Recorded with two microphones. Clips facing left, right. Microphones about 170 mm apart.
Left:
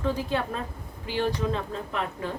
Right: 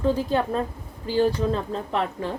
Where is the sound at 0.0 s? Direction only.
40° right (ahead or behind).